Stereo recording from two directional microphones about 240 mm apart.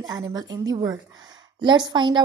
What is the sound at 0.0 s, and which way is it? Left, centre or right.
A woman's voice, centre.